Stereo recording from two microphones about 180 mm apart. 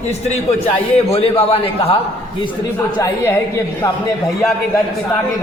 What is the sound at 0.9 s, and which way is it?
A man's voice, 35° left (ahead or behind).